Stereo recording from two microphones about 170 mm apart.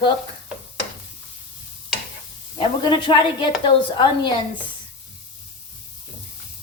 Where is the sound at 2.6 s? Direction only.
30° left (ahead or behind).